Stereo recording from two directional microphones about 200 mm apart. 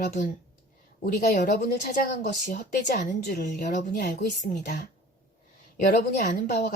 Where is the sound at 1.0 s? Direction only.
55° left (ahead or behind).